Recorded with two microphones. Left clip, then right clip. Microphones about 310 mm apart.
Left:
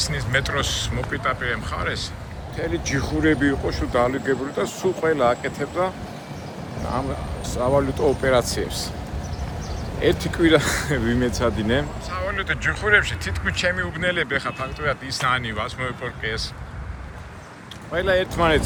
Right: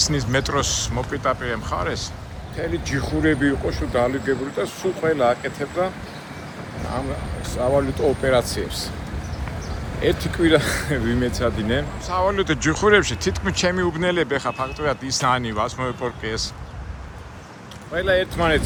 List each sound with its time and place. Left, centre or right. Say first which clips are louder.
0.0 s speech: right 2 dB; centre
2.6 s speech: even; centre
7.4 s speech: even; centre
10.0 s speech: left 1 dB; centre
12.0 s speech: right 5 dB; centre
17.9 s speech: right 1 dB; centre